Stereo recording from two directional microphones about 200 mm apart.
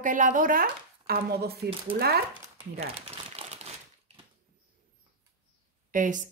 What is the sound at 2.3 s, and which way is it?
Crumpling, 30° right (ahead or behind).